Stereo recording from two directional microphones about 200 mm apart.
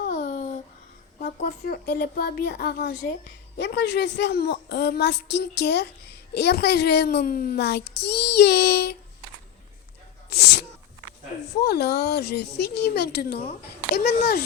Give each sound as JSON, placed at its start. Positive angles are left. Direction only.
{"t": 0.0, "sound": "babbling", "side_deg": 40}
{"t": 1.6, "sound": "a child's voice", "side_deg": 55}
{"t": 10.2, "sound": "a child's voice", "side_deg": 55}